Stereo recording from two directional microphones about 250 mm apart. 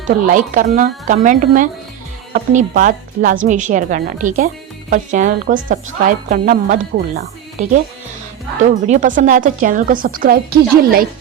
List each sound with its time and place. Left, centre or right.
0.3 s speech: right
8.9 s speech: right